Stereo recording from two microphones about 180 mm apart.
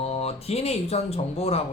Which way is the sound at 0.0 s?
35° left (ahead or behind).